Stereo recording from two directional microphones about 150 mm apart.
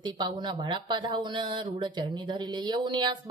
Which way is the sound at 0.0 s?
30° right (ahead or behind).